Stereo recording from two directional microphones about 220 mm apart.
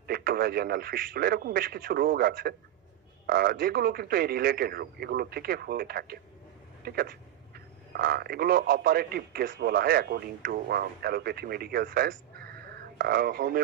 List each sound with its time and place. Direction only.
0.0 s a man's voice: 45° right (ahead or behind)